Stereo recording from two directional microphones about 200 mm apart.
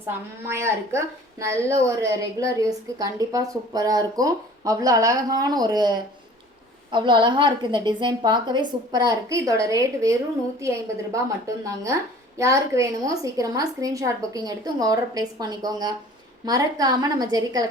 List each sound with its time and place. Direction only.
0.4 s a woman's voice: 15° right (ahead or behind)